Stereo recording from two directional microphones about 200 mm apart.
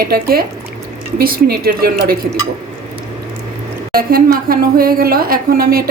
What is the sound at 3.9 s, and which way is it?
A woman's voice, 45° right (ahead or behind).